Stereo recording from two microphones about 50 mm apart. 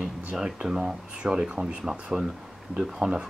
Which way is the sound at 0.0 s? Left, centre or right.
Centre.